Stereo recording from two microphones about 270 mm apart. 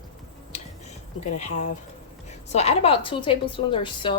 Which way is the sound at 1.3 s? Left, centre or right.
Left.